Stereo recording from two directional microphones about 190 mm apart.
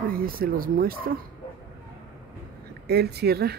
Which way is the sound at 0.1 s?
50° right (ahead or behind).